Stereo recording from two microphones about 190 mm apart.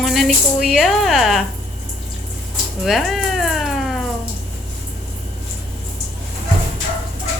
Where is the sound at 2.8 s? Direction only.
Centre (ahead or behind).